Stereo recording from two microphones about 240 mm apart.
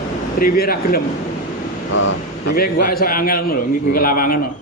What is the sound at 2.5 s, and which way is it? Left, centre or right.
A man's voice, left.